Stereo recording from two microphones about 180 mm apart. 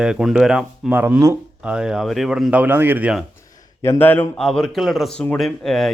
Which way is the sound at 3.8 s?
10° left (ahead or behind).